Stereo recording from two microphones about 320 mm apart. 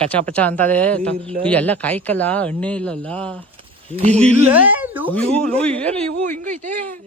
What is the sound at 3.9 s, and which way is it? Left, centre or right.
Speech, right.